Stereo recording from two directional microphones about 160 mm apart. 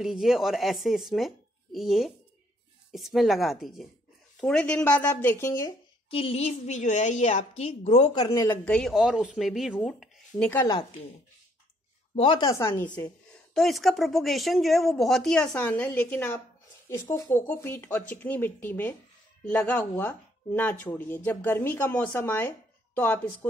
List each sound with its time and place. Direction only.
0.0 s speech: centre (ahead or behind); by 5.8 s 15° left (ahead or behind)
6.0 s a woman's voice: 35° left (ahead or behind)
8.1 s speech: 25° left (ahead or behind)
8.6 s speech: 5° left (ahead or behind)
12.2 s speech: 30° left (ahead or behind); by 23.5 s 10° left (ahead or behind)